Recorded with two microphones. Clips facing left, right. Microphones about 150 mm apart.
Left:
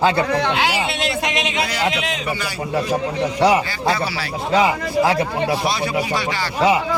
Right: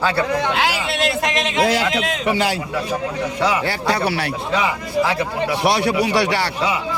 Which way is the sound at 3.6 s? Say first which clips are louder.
Right 1 dB; 70° right (ahead or behind).